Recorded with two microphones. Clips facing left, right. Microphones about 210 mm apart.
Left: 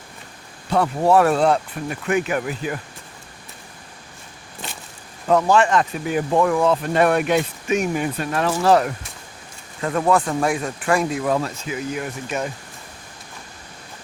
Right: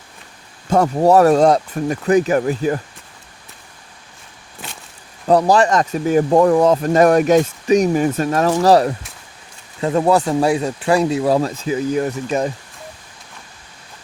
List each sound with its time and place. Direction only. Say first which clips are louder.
0.7 s speech: right 4 dB; 40° right (ahead or behind)
5.3 s speech: right 3 dB; 35° right (ahead or behind)
9.8 s speech: right 4 dB; 25° right (ahead or behind)